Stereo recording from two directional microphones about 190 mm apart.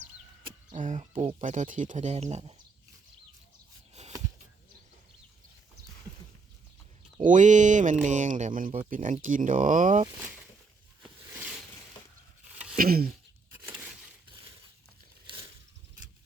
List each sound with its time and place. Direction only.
0.8 s speech: 40° right (ahead or behind)
4.0 s a sound: 35° right (ahead or behind)
7.3 s speech: 40° right (ahead or behind)
12.7 s speech: 50° right (ahead or behind)